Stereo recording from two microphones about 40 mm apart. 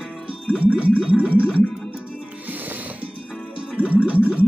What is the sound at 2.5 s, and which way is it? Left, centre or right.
Music, right.